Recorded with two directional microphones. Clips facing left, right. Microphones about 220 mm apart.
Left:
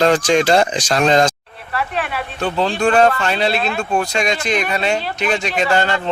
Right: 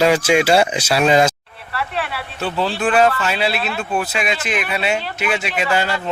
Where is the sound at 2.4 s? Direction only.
5° right (ahead or behind).